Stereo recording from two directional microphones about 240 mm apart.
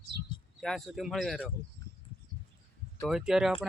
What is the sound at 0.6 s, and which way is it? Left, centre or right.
Speech, centre.